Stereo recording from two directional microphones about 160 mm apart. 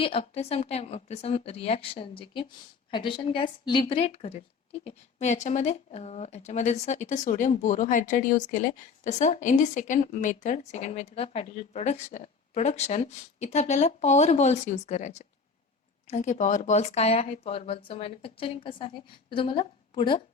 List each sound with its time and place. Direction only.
0.0 s a woman's voice: 35° left (ahead or behind)